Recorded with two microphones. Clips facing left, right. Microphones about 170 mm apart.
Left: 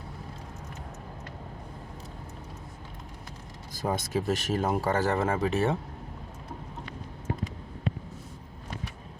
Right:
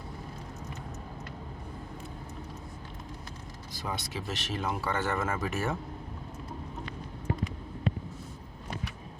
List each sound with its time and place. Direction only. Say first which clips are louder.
3.8 s speech: left 8 dB; 45° left (ahead or behind); by 5.7 s 30° left (ahead or behind)